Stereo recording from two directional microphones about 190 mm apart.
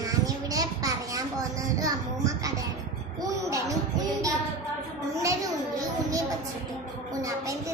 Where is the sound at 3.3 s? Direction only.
15° right (ahead or behind).